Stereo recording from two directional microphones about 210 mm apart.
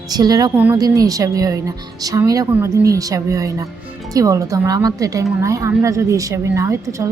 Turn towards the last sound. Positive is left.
turn(degrees=-15)  # may be behind; listen again after turning